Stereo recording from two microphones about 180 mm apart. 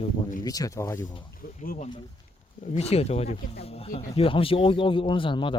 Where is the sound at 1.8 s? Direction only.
30° left (ahead or behind).